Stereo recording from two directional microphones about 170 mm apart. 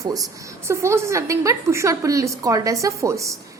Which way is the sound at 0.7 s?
15° right (ahead or behind).